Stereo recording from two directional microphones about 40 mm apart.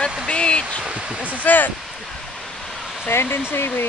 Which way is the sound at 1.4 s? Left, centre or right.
Left.